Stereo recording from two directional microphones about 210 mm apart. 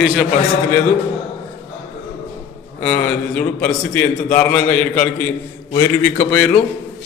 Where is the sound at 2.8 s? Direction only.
5° left (ahead or behind).